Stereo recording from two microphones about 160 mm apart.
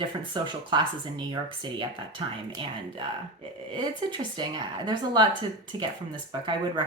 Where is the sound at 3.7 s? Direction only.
30° right (ahead or behind).